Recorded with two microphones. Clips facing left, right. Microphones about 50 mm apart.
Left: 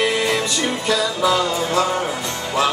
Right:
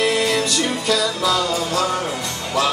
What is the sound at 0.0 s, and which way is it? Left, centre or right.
Music, left.